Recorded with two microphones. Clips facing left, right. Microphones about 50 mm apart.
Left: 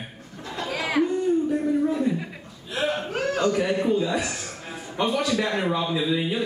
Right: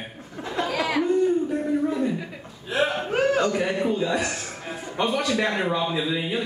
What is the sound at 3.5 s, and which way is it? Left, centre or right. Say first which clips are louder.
Speech: left 1 dB; centre.